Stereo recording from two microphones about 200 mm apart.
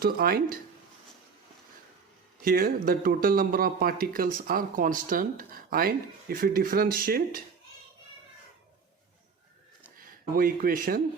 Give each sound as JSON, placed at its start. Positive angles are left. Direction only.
{"t": 0.0, "sound": "speech", "side_deg": -45}
{"t": 2.4, "sound": "speech", "side_deg": -45}
{"t": 10.1, "sound": "speech", "side_deg": -45}